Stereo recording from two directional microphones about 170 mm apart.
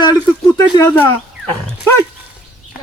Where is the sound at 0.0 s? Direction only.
20° left (ahead or behind).